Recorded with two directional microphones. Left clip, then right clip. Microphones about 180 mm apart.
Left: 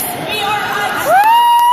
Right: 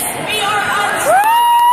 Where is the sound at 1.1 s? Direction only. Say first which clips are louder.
Left 3 dB; 5° left (ahead or behind).